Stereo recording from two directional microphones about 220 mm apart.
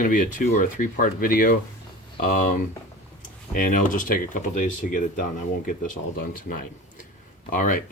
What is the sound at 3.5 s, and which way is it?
Speech, 40° left (ahead or behind).